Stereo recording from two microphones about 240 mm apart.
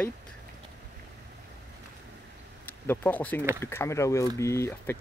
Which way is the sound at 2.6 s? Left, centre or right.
Centre.